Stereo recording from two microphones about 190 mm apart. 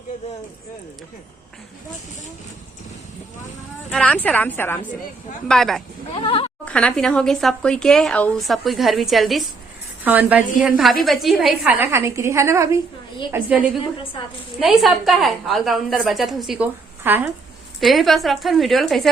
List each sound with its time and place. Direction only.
3.8 s a woman's voice: 5° left (ahead or behind)
6.1 s speech: 30° left (ahead or behind)
6.7 s speech: 5° left (ahead or behind)
11.8 s a woman's voice: 15° right (ahead or behind)
14.6 s speech: centre (ahead or behind)